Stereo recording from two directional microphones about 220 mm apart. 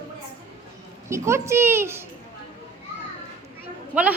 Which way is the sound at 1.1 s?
10° right (ahead or behind).